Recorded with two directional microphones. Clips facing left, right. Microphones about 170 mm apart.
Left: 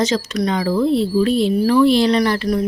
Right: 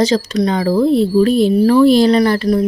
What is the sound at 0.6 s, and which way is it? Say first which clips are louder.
Speech: right 4 dB; 40° right (ahead or behind).